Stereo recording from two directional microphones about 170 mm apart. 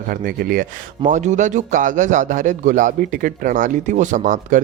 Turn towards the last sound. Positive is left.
turn(degrees=-50)  # may be behind; listen again after turning